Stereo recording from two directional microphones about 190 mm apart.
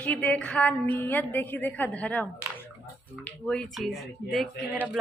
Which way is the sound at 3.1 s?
5° left (ahead or behind).